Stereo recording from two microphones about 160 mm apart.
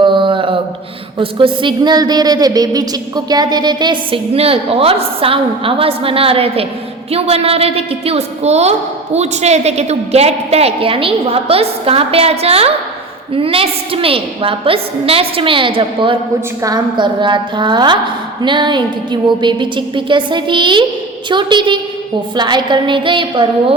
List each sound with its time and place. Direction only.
0.0 s mantra: 30° right (ahead or behind)
1.2 s a woman's voice: 30° right (ahead or behind)